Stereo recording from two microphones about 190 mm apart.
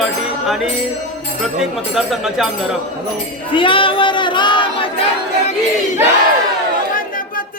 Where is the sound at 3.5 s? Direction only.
25° left (ahead or behind).